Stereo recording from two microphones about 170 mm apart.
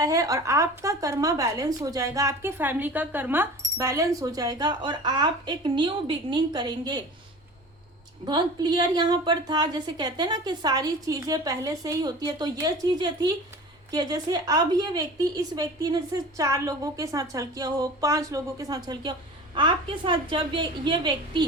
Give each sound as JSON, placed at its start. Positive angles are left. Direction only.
{"t": 0.0, "sound": "a woman's voice", "side_deg": -20}
{"t": 8.2, "sound": "a woman's voice", "side_deg": -25}